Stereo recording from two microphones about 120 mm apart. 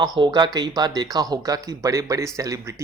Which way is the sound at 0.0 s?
35° right (ahead or behind).